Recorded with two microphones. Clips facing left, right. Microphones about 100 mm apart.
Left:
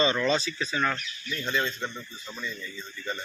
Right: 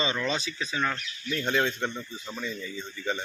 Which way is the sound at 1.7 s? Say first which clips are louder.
Right 3 dB; 60° right (ahead or behind).